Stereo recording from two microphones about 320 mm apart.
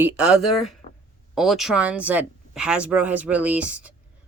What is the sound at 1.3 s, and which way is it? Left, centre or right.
Speech, centre.